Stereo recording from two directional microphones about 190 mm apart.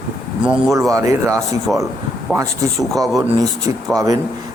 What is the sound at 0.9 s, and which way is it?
Speech, 15° right (ahead or behind).